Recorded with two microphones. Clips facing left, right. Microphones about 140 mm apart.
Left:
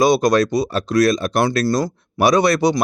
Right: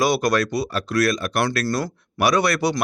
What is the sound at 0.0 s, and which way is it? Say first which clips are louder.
Speech: left 5 dB; 20° left (ahead or behind).